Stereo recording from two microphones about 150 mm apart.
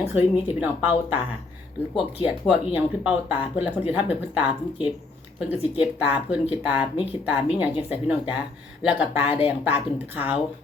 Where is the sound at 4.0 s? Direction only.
35° left (ahead or behind).